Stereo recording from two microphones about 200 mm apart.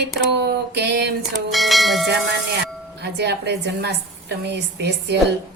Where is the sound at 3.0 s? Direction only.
55° right (ahead or behind).